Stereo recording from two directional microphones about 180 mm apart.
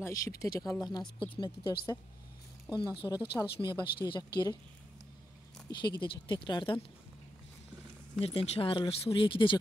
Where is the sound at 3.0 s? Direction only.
25° left (ahead or behind).